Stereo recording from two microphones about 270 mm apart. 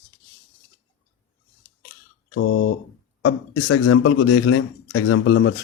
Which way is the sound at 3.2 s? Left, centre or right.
Left.